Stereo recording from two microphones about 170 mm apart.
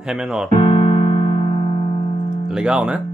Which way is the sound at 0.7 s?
30° left (ahead or behind).